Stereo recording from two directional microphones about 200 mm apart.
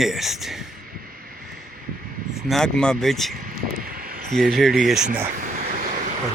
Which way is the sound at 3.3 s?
45° right (ahead or behind).